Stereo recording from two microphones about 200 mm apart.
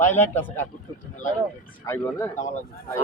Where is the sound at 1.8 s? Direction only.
15° left (ahead or behind).